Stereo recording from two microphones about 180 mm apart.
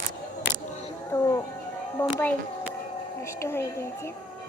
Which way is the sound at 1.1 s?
15° left (ahead or behind).